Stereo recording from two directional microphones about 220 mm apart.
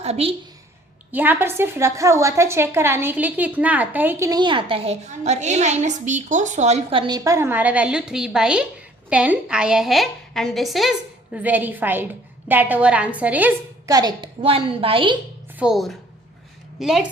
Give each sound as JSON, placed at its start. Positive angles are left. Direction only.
{"t": 0.0, "sound": "a woman's voice", "side_deg": -25}
{"t": 1.1, "sound": "a woman's voice", "side_deg": -10}
{"t": 15.5, "sound": "a woman's voice", "side_deg": 0}